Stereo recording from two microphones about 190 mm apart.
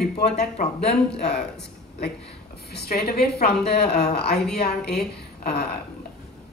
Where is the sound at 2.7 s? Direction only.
55° left (ahead or behind).